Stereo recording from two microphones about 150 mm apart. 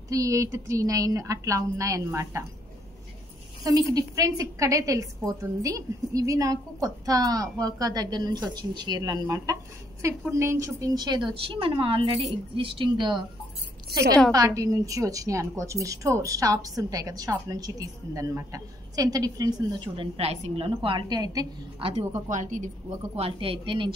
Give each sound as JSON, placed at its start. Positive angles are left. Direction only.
{"t": 0.1, "sound": "a woman's voice", "side_deg": -20}
{"t": 3.6, "sound": "a woman's voice", "side_deg": -25}
{"t": 14.3, "sound": "a woman's voice", "side_deg": -25}
{"t": 20.2, "sound": "a woman's voice", "side_deg": -45}
{"t": 22.3, "sound": "a woman's voice", "side_deg": -55}
{"t": 23.1, "sound": "a woman's voice", "side_deg": -40}